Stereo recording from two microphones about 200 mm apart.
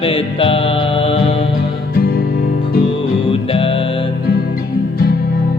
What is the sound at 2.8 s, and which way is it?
Music, 25° left (ahead or behind).